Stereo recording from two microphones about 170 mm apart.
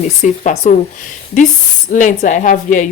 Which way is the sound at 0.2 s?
45° left (ahead or behind).